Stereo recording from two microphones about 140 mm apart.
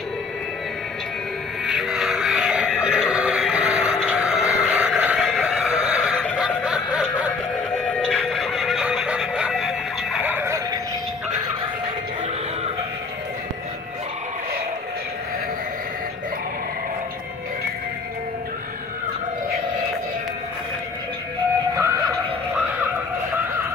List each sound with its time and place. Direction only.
1.7 s a sound: 5° right (ahead or behind)
4.0 s music: 5° right (ahead or behind)
5.3 s a sound: 5° right (ahead or behind)
6.3 s snicker: 5° right (ahead or behind)
7.7 s music: 5° left (ahead or behind)
10.2 s music: 15° right (ahead or behind)